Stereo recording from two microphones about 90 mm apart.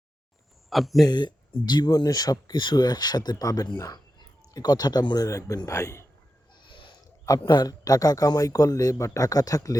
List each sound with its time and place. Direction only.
0.7 s speech: centre (ahead or behind)
1.0 s a man's voice: 55° left (ahead or behind); by 6.1 s 30° left (ahead or behind)
6.6 s a sound: 65° left (ahead or behind)
7.3 s a man's voice: 50° left (ahead or behind)